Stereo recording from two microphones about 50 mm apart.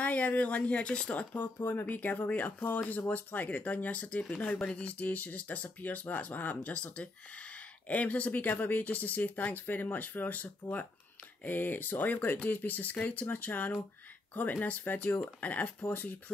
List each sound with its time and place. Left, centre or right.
0.0 s speech: left
1.3 s speech: left